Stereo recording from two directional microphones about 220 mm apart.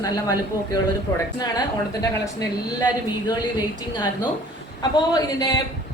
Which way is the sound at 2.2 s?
15° left (ahead or behind).